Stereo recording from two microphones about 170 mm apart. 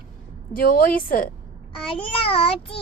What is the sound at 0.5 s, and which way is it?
Speech, 60° left (ahead or behind).